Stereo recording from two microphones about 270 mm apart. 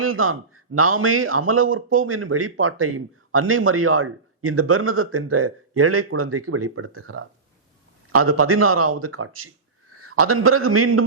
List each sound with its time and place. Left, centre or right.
0.0 s a man's voice: right